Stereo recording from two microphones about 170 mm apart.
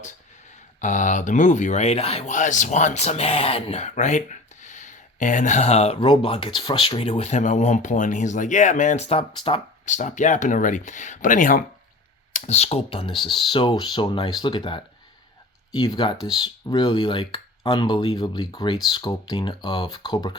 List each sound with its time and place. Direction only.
0.8 s speech: 45° left (ahead or behind)
9.8 s speech: 45° left (ahead or behind)
12.3 s speech: 40° left (ahead or behind)
13.1 s speech: centre (ahead or behind)
13.5 s speech: 30° left (ahead or behind)